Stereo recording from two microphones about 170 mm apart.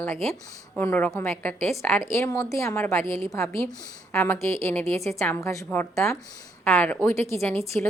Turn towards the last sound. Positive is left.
turn(degrees=10)  # may be behind; listen again after turning